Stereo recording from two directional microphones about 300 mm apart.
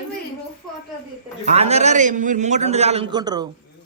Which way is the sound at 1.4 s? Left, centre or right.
Right.